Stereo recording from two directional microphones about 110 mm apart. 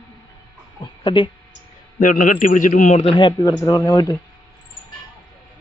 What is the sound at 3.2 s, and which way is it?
Speech, 40° left (ahead or behind).